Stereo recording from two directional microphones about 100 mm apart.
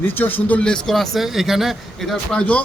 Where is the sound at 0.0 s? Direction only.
20° left (ahead or behind).